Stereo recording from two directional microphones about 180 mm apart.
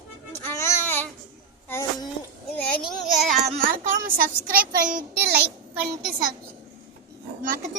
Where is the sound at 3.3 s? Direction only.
45° right (ahead or behind).